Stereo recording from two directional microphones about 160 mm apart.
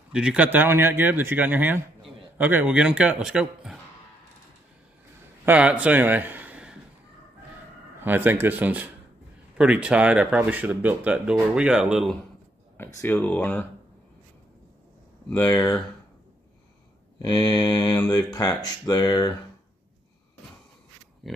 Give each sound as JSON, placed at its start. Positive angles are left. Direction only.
{"t": 0.1, "sound": "speech", "side_deg": -5}
{"t": 5.4, "sound": "a man's voice", "side_deg": -10}
{"t": 8.0, "sound": "speech", "side_deg": -10}
{"t": 12.7, "sound": "speech", "side_deg": 15}
{"t": 15.3, "sound": "speech", "side_deg": 20}
{"t": 17.2, "sound": "speech", "side_deg": 25}